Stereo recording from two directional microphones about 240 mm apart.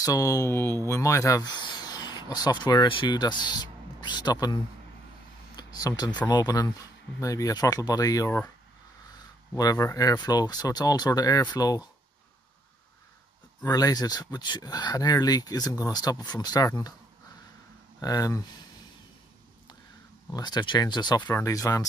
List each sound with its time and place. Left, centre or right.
0.0 s speech: centre
5.6 s speech: centre
9.5 s speech: centre
13.6 s speech: centre
18.0 s speech: centre
20.3 s speech: centre